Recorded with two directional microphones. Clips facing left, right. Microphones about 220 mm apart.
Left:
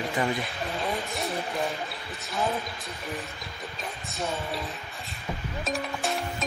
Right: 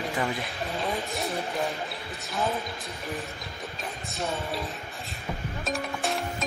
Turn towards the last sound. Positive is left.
turn(degrees=0)  # may be behind; listen again after turning